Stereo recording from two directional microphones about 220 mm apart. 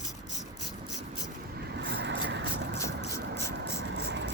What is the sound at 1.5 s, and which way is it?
Vehicle, 50° right (ahead or behind).